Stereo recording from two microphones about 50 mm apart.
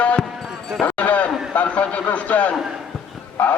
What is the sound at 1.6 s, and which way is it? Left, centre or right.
A man's voice, left.